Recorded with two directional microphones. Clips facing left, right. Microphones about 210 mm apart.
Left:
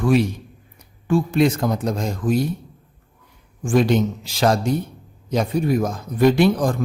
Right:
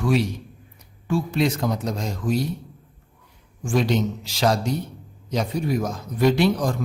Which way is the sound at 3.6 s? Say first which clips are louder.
Left 4 dB; 50° left (ahead or behind).